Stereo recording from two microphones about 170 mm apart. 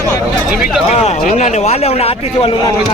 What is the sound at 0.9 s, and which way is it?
A man's voice, 40° left (ahead or behind).